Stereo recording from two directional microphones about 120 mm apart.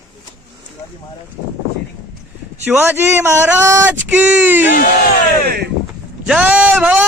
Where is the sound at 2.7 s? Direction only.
15° right (ahead or behind).